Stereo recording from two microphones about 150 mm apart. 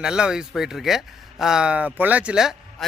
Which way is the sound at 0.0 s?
5° right (ahead or behind).